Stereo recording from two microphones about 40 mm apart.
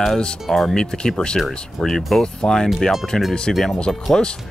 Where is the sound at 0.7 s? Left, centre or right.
Centre.